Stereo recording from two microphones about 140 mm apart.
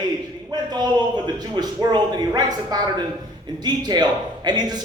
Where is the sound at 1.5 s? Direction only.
30° right (ahead or behind).